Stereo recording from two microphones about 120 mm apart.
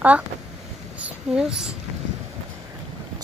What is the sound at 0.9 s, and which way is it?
Speech, 10° right (ahead or behind).